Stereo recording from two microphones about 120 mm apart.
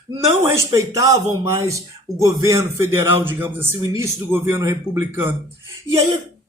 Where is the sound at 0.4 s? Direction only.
25° right (ahead or behind).